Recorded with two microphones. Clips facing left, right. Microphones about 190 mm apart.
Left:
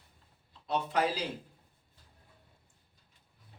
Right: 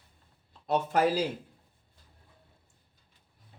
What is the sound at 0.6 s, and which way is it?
Speech, 45° right (ahead or behind).